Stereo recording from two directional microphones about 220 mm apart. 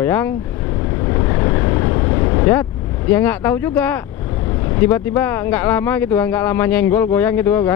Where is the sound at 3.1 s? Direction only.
10° left (ahead or behind).